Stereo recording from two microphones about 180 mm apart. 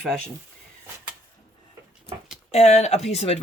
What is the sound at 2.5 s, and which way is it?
Speech, 35° left (ahead or behind).